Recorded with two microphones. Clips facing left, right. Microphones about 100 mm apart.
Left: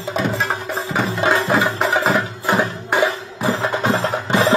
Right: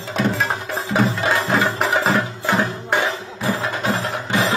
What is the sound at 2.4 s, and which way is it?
Music, 15° left (ahead or behind).